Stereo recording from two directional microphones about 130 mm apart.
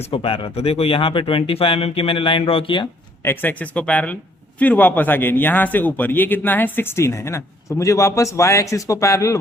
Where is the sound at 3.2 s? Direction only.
15° left (ahead or behind).